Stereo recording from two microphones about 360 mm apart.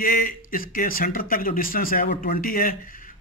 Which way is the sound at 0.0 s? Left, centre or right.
Left.